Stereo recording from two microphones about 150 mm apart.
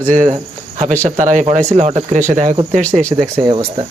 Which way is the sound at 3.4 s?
35° right (ahead or behind).